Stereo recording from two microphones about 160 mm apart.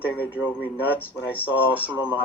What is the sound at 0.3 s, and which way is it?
Speech, 10° right (ahead or behind).